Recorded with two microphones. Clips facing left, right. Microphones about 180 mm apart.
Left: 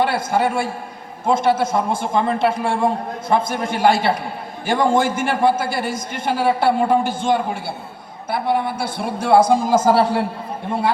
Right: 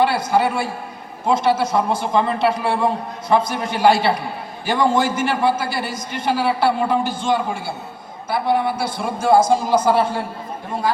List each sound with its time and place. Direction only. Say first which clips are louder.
0.0 s a woman's voice: right 1 dB; 50° left (ahead or behind)